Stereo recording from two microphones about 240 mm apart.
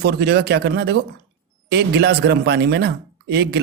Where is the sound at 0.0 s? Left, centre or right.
Right.